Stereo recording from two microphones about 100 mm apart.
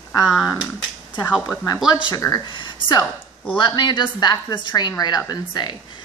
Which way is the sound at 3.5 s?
50° left (ahead or behind).